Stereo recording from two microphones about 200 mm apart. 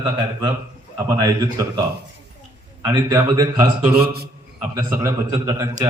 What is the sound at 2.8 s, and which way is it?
A man's voice, 20° right (ahead or behind).